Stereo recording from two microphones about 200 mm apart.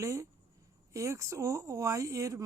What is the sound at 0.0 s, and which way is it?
Speech, 15° right (ahead or behind).